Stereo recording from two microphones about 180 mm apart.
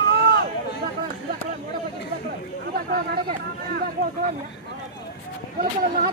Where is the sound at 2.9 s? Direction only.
55° right (ahead or behind).